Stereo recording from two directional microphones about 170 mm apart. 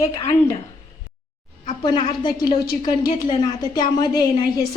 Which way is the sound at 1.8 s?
30° left (ahead or behind).